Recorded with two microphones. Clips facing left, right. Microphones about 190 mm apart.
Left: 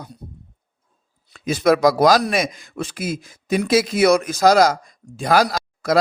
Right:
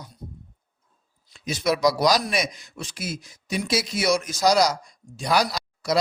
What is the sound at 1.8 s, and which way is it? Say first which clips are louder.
A man's voice: left 6 dB; 55° left (ahead or behind).